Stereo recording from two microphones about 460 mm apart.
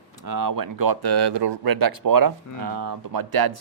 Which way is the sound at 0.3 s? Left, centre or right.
Right.